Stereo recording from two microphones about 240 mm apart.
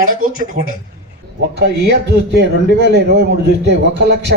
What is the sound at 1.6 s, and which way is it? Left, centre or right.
A man's voice, right.